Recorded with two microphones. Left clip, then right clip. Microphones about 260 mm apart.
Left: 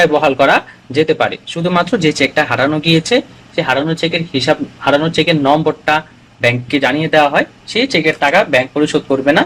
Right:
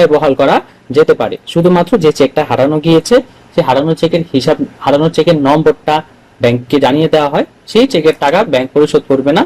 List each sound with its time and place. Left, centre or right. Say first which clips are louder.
0.0 s speech: right 2 dB; right